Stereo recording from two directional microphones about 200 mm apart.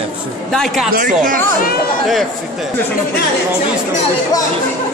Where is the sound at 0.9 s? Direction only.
45° right (ahead or behind).